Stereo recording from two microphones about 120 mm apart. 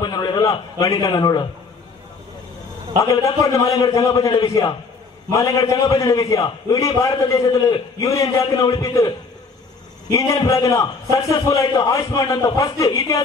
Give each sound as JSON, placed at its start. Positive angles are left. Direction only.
{"t": 0.0, "sound": "a man's voice", "side_deg": 35}
{"t": 3.1, "sound": "a man's voice", "side_deg": 25}